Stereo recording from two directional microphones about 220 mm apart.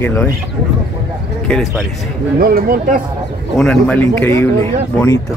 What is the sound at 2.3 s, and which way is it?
Speech, 45° right (ahead or behind).